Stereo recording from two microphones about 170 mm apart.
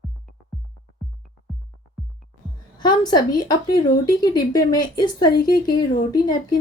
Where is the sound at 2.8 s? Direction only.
25° left (ahead or behind).